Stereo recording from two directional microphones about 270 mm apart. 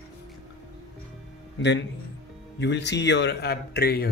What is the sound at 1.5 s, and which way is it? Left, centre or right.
Speech, left.